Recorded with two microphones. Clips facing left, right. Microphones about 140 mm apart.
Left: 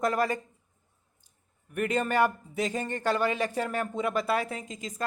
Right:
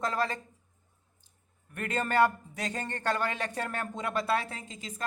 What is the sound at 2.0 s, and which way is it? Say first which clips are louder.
Speech: even; 10° left (ahead or behind).